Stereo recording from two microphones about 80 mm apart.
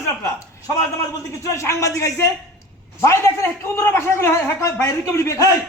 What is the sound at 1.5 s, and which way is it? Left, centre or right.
A man's voice, left.